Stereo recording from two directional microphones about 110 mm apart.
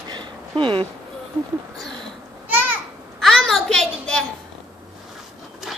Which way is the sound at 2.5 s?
15° right (ahead or behind).